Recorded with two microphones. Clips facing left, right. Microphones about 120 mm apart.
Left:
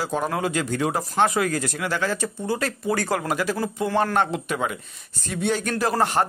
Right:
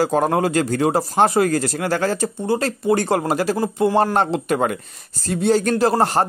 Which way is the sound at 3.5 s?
20° right (ahead or behind).